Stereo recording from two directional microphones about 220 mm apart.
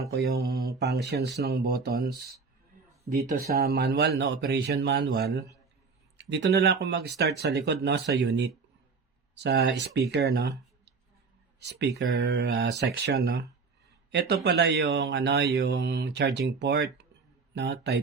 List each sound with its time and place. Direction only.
0.3 s speech: 45° right (ahead or behind)
3.3 s speech: 45° right (ahead or behind)